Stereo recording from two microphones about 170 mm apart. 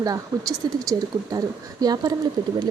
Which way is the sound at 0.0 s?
20° right (ahead or behind).